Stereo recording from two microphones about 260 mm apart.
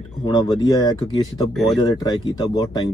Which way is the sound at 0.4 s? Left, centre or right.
Centre.